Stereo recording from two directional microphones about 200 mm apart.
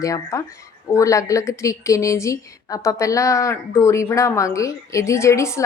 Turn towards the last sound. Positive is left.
turn(degrees=15)  # may be behind; listen again after turning